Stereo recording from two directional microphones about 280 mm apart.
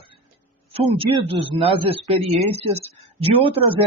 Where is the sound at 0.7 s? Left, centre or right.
Centre.